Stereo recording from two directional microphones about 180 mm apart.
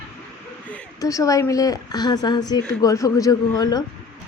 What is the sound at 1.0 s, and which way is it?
Speech, 20° left (ahead or behind).